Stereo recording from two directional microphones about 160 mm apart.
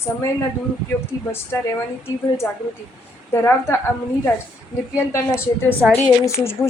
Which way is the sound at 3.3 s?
15° left (ahead or behind).